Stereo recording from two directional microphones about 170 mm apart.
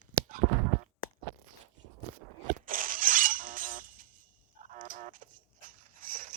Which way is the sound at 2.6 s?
55° right (ahead or behind).